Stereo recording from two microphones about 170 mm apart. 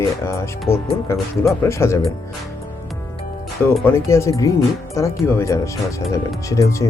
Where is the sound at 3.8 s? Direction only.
15° left (ahead or behind).